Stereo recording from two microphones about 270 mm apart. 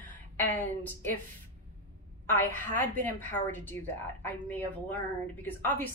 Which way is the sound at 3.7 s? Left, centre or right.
Right.